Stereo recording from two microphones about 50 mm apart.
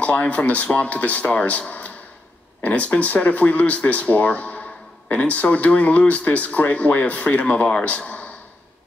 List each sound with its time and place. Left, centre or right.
0.0 s speech: left
2.6 s speech: left